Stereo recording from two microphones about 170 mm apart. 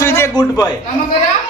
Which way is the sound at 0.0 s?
15° left (ahead or behind).